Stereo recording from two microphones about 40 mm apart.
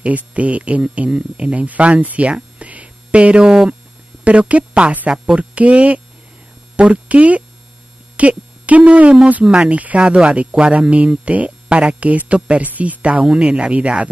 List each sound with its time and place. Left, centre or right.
0.0 s speech: right
2.6 s a sound: right
4.2 s a woman's voice: right
12.6 s speech: right
13.3 s speech: right